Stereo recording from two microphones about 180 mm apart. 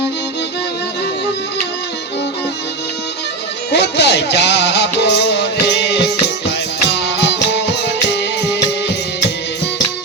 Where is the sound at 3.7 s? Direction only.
70° left (ahead or behind).